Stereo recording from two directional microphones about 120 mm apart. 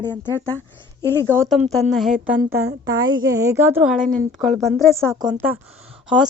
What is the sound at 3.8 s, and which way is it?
Speech, 5° right (ahead or behind).